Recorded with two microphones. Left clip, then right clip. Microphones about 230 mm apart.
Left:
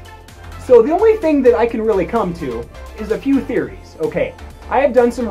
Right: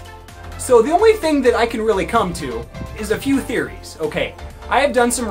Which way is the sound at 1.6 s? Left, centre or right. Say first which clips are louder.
Left 2 dB; centre.